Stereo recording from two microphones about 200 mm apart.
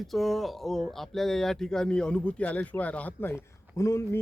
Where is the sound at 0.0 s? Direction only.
Centre (ahead or behind).